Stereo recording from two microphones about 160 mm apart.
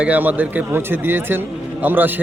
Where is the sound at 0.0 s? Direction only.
10° right (ahead or behind).